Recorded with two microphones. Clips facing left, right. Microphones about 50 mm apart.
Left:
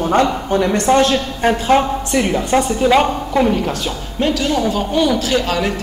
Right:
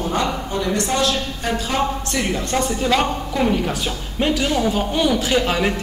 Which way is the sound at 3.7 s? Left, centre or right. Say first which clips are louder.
Left 3 dB; centre.